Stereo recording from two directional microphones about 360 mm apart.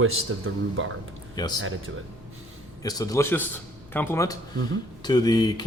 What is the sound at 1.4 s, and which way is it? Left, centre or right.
Speech, centre.